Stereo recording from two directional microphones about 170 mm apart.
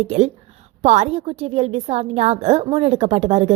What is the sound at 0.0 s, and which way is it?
A woman's voice, 40° right (ahead or behind).